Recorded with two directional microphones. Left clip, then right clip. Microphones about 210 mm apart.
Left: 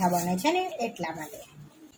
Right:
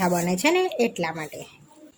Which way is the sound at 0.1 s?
40° right (ahead or behind).